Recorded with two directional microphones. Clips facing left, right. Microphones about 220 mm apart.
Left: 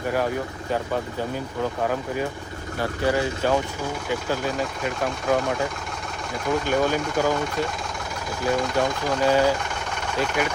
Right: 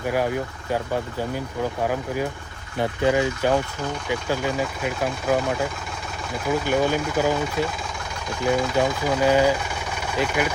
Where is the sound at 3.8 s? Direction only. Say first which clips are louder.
Even; 5° left (ahead or behind).